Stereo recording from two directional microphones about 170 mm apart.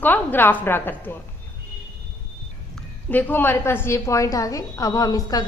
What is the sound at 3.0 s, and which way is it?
A woman's voice, 10° left (ahead or behind).